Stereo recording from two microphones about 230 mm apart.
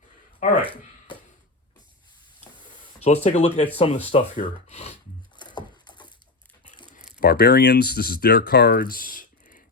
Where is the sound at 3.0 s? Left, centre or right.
Left.